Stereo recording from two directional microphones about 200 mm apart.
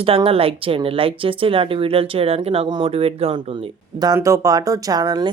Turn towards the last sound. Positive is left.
turn(degrees=-20)  # may be behind; listen again after turning